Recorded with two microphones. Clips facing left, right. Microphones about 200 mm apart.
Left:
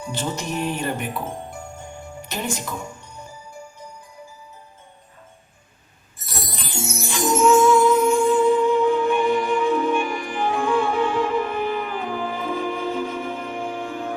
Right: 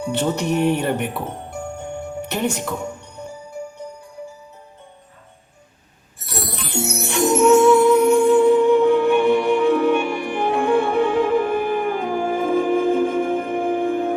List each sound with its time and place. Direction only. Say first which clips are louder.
0.0 s speech: right 7 dB; 65° right (ahead or behind)
3.2 s music: right 7 dB; 65° right (ahead or behind)
6.1 s music: right 5 dB; 65° right (ahead or behind)